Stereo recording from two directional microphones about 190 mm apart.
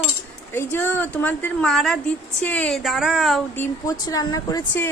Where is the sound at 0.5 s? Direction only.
10° left (ahead or behind).